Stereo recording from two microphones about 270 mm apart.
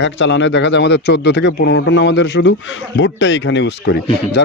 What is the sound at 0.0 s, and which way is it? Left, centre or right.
Speech, left.